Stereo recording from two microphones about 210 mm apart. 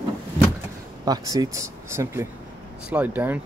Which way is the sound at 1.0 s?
15° right (ahead or behind).